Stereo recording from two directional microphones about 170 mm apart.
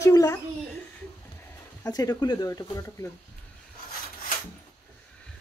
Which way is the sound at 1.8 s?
20° left (ahead or behind).